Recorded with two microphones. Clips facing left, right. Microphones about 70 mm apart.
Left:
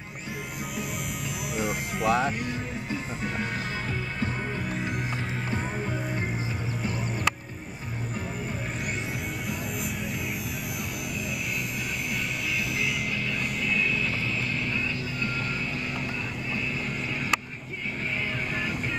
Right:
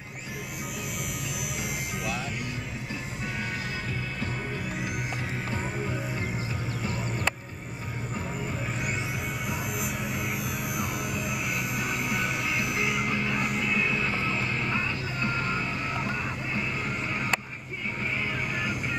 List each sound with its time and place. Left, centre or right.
2.0 s music: left
12.5 s music: right
13.4 s music: centre